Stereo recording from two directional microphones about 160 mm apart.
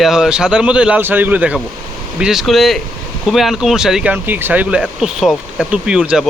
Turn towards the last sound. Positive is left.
turn(degrees=-5)  # may be behind; listen again after turning